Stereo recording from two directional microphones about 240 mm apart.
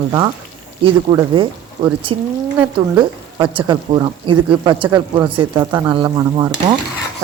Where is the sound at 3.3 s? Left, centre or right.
Centre.